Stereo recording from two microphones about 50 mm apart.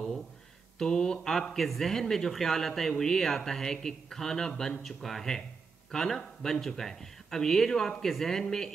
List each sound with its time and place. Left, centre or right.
0.7 s speech: centre
1.3 s speech: centre